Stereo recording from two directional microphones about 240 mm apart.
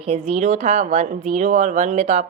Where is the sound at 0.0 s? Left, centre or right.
Right.